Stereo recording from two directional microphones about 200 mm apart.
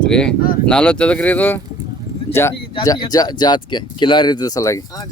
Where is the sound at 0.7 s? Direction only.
5° left (ahead or behind).